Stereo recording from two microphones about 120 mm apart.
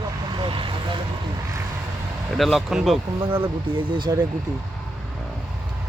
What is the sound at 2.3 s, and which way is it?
Speech, centre (ahead or behind).